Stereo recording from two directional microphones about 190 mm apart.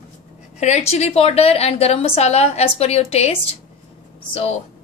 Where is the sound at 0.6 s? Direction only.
35° left (ahead or behind).